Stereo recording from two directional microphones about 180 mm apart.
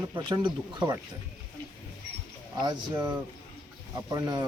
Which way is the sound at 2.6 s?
25° right (ahead or behind).